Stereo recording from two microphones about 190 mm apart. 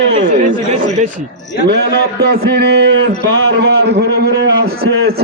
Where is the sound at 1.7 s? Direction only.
60° right (ahead or behind).